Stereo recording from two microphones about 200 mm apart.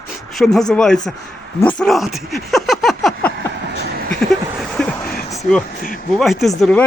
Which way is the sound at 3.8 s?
50° right (ahead or behind).